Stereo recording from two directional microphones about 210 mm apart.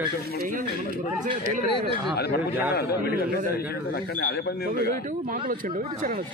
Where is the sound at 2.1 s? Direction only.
50° left (ahead or behind).